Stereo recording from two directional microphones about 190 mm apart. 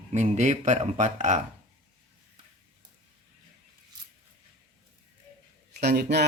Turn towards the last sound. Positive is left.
turn(degrees=-60)  # may be behind; listen again after turning